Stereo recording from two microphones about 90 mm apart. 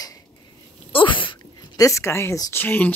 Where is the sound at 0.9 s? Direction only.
70° left (ahead or behind).